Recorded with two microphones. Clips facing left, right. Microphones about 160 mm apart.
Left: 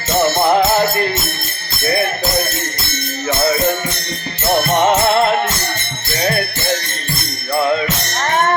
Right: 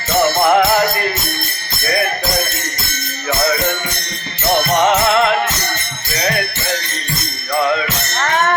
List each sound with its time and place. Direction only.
0.2 s music: 30° left (ahead or behind)
4.9 s music: 35° left (ahead or behind)
7.5 s music: 30° left (ahead or behind)